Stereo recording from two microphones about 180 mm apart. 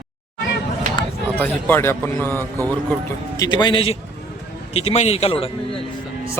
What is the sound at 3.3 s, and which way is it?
A man's voice, 20° left (ahead or behind).